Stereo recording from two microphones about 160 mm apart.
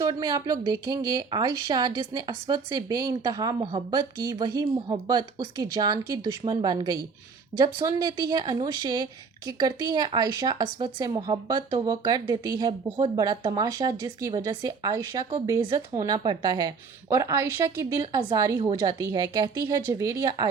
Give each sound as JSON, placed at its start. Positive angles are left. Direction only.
{"t": 0.0, "sound": "speech", "side_deg": -25}